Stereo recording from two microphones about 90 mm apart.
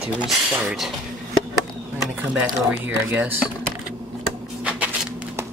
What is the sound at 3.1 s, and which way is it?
Speech, 15° right (ahead or behind).